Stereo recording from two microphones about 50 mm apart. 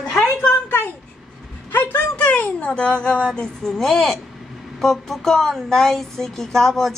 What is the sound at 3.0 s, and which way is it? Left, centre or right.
Speech, centre.